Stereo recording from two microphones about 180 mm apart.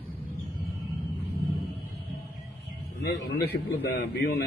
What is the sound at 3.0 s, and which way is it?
A man's voice, 65° left (ahead or behind).